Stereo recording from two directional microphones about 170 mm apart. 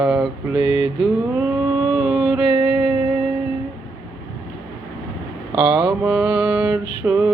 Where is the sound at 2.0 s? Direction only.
10° right (ahead or behind).